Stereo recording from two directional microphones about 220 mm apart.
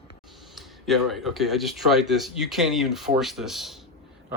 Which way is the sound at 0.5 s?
Centre (ahead or behind).